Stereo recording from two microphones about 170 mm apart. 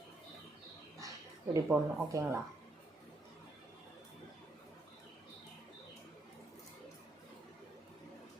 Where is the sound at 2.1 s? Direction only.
20° right (ahead or behind).